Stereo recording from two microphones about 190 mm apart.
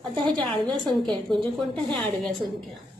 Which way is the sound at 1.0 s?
Centre (ahead or behind).